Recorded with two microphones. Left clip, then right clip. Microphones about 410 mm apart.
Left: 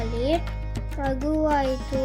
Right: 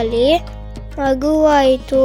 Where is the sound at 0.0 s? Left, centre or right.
Centre.